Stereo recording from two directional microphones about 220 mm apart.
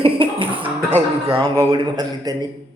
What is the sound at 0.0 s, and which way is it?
Music, 25° right (ahead or behind).